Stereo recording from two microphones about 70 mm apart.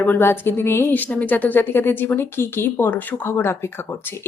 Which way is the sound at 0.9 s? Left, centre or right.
Left.